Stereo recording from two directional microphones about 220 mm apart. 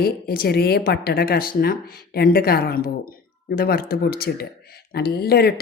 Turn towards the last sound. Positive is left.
turn(degrees=45)  # may be behind; listen again after turning